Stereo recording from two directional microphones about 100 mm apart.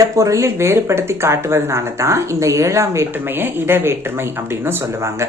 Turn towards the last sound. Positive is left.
turn(degrees=-25)  # may be behind; listen again after turning